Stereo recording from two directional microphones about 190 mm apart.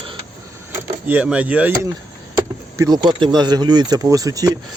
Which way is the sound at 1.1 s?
5° right (ahead or behind).